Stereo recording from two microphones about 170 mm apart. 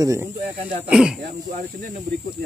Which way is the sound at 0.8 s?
5° right (ahead or behind).